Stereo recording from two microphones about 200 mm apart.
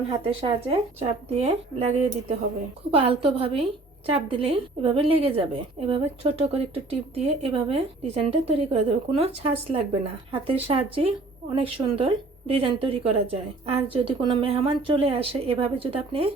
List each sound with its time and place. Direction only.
0.3 s a woman's voice: 30° right (ahead or behind)